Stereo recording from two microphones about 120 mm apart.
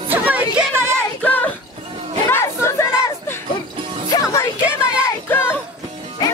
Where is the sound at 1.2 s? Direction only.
15° left (ahead or behind).